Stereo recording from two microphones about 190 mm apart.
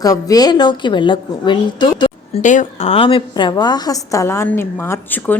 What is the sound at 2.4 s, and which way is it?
A woman's voice, 40° left (ahead or behind).